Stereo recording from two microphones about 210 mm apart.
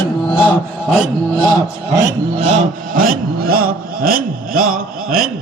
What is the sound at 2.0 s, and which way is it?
Rub, 30° right (ahead or behind).